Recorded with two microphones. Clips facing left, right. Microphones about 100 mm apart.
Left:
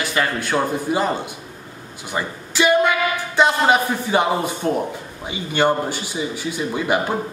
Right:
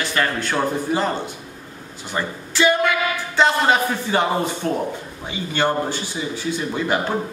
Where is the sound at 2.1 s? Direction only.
15° left (ahead or behind).